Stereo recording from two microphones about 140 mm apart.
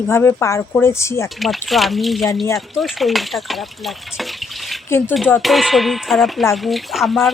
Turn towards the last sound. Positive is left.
turn(degrees=0)  # may be behind; listen again after turning